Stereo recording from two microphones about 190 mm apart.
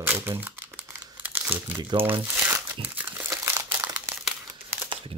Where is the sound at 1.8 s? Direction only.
25° right (ahead or behind).